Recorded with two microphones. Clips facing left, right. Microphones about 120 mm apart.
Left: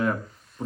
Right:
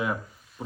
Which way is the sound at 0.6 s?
5° right (ahead or behind).